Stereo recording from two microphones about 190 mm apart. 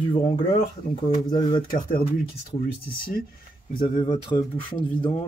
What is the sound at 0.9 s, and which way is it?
Speech, 25° left (ahead or behind).